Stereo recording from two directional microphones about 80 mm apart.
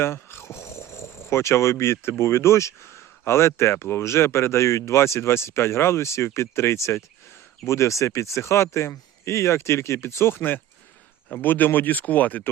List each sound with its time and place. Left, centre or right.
0.0 s speech: left